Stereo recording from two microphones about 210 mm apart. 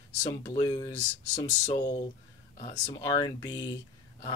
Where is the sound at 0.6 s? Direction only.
15° left (ahead or behind).